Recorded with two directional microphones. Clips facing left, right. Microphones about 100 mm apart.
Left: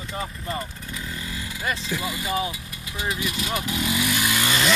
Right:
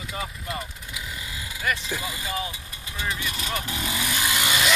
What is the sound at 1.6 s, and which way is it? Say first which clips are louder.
Speech: even; 25° left (ahead or behind).